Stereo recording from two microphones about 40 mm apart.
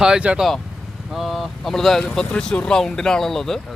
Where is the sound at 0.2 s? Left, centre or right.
Right.